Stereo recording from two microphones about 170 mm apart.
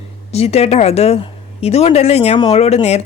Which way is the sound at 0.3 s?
40° left (ahead or behind).